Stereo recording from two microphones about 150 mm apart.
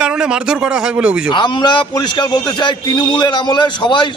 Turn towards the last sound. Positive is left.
turn(degrees=30)  # may be behind; listen again after turning